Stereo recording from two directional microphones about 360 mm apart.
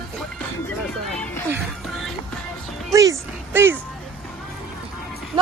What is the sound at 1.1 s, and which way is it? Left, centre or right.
Music, centre.